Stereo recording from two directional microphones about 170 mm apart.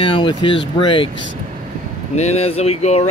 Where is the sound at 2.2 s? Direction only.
40° left (ahead or behind).